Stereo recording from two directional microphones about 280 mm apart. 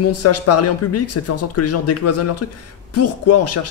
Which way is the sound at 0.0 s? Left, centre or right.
Left.